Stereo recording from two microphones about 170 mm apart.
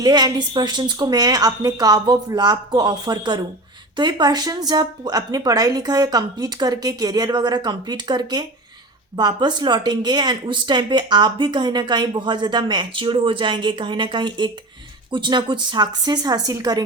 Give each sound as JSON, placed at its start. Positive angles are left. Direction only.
{"t": 0.0, "sound": "speech", "side_deg": -25}